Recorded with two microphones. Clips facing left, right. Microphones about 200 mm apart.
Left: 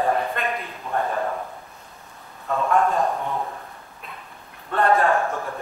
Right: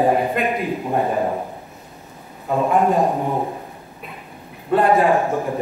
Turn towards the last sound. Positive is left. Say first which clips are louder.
# right 5 dB
turn(degrees=-15)  # may be behind; listen again after turning